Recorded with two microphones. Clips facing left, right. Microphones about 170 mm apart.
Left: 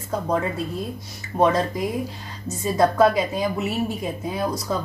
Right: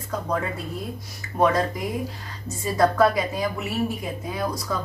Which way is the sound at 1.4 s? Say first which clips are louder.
Left 2 dB; 25° left (ahead or behind).